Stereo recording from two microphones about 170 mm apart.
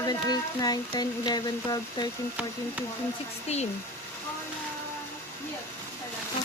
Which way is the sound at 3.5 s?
40° left (ahead or behind).